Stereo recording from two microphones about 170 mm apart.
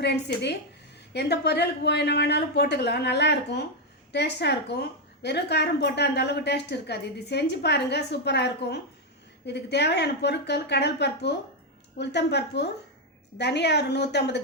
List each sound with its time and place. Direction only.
0.0 s a woman's voice: 80° left